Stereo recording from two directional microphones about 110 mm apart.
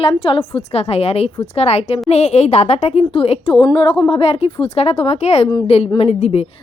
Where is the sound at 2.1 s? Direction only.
80° left.